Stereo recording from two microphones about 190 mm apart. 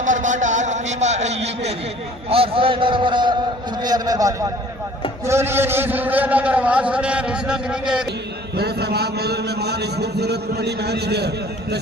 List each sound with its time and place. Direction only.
0.0 s a sound: 40° right (ahead or behind)
2.3 s a man's voice: 30° right (ahead or behind); by 8.0 s 5° right (ahead or behind)
8.5 s a man's voice: 60° right (ahead or behind)